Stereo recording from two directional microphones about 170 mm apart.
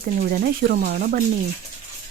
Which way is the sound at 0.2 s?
65° right (ahead or behind).